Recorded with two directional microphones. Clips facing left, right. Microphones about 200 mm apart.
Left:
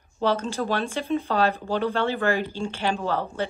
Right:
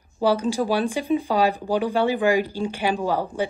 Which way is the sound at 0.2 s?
15° right (ahead or behind).